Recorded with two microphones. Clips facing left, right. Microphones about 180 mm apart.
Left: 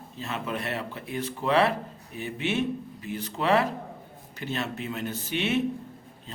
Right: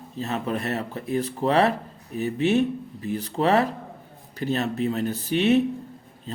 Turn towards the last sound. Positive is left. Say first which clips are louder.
# right 7 dB
turn(degrees=-40)  # may be behind; listen again after turning